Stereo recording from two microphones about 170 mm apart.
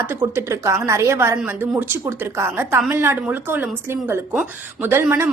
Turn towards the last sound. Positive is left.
turn(degrees=-15)  # may be behind; listen again after turning